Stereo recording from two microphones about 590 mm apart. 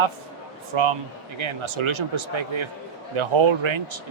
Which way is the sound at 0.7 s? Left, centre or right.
Right.